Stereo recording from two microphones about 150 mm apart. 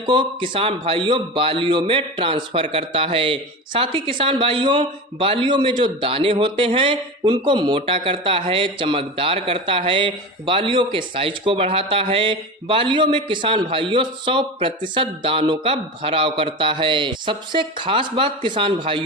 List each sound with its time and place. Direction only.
0.0 s a man's voice: 30° right (ahead or behind)